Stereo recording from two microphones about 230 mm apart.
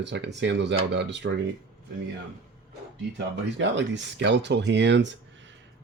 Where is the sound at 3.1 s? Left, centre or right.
Right.